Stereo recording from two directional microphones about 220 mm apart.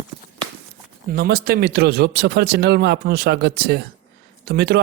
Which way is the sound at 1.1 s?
45° right (ahead or behind).